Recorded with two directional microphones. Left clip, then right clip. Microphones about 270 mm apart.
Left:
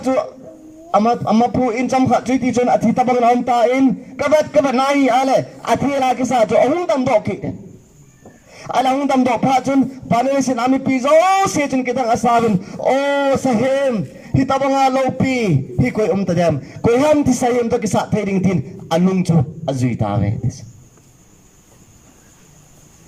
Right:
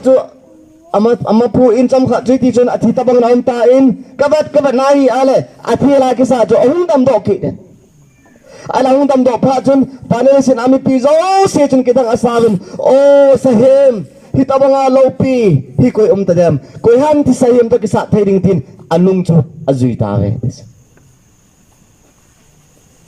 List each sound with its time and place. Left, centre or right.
0.0 s a man's voice: centre
8.5 s a man's voice: centre